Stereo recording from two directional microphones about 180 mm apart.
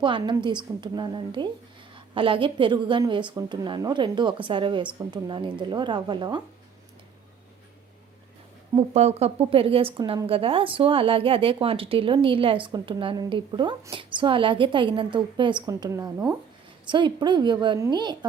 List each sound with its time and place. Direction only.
0.0 s a woman's voice: 25° right (ahead or behind)
8.7 s a woman's voice: 35° right (ahead or behind)